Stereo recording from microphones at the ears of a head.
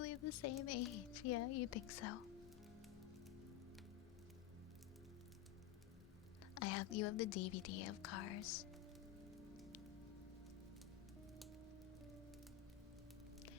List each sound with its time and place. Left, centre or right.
0.0 s speech: left
6.5 s speech: left